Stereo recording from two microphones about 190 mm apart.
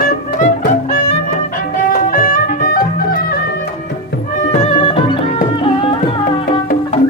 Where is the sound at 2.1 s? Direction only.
45° left (ahead or behind).